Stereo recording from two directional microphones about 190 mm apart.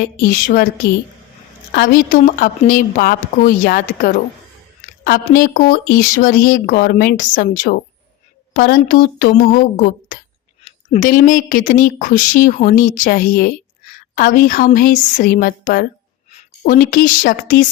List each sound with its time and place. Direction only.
1.7 s speech: 50° left (ahead or behind)
10.6 s a sound: 30° left (ahead or behind)
11.0 s speech: 45° left (ahead or behind)